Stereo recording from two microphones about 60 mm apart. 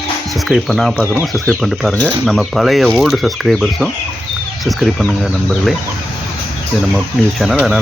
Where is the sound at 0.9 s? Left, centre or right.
Right.